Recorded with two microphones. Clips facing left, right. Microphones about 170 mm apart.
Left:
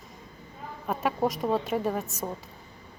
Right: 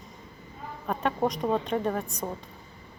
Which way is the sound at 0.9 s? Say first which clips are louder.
Even; 5° left (ahead or behind).